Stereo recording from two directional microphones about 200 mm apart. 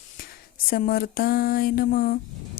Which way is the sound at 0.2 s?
45° left (ahead or behind).